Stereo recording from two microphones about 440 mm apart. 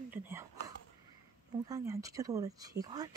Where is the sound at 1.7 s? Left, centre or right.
Centre.